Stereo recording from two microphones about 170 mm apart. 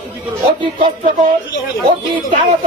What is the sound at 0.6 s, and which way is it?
Speech, 30° right (ahead or behind).